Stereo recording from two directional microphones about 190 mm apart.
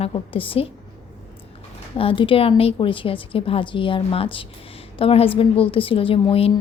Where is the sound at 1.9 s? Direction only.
25° left (ahead or behind).